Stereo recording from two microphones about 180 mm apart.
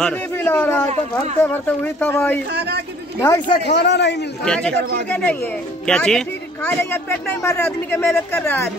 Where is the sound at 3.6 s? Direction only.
70° left (ahead or behind).